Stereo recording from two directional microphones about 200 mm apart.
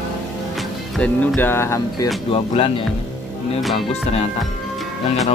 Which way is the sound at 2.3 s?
25° left (ahead or behind).